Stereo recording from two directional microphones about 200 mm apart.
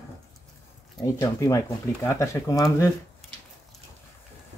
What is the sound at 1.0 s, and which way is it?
Speech, 15° left (ahead or behind).